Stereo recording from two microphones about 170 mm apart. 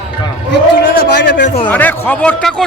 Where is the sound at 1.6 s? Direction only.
10° left (ahead or behind).